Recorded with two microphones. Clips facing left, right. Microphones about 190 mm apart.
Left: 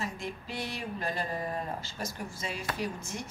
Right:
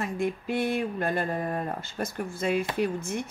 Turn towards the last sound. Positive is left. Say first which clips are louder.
# right 8 dB
turn(degrees=-55)  # may be behind; listen again after turning